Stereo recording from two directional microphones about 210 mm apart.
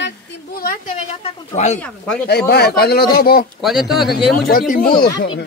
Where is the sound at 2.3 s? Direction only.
50° left (ahead or behind).